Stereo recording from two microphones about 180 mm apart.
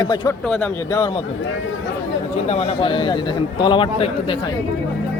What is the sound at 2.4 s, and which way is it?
A man's voice, 35° left (ahead or behind).